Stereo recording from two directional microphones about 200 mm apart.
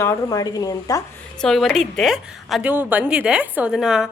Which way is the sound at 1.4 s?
Centre (ahead or behind).